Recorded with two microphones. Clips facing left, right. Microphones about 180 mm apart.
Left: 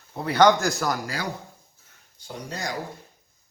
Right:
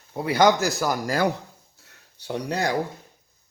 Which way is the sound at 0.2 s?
10° right (ahead or behind).